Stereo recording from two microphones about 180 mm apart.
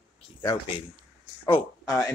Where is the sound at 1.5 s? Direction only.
30° left (ahead or behind).